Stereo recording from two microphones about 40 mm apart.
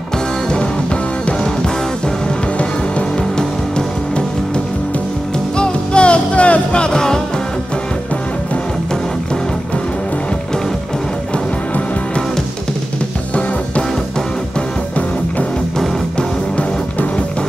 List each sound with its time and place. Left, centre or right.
3.0 s music: left
5.6 s music: left